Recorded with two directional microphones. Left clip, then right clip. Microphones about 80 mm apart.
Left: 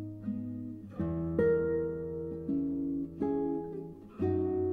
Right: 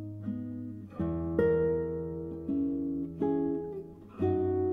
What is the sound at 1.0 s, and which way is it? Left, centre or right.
Music, centre.